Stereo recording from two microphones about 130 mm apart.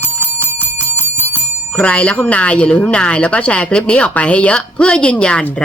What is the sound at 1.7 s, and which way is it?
Speech, 10° left (ahead or behind).